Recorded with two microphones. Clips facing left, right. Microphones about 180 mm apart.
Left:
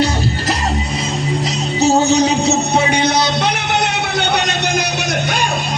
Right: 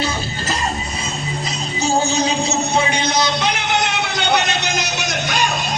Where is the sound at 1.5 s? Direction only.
70° left (ahead or behind).